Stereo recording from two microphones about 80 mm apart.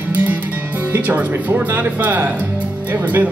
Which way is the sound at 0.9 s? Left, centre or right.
Right.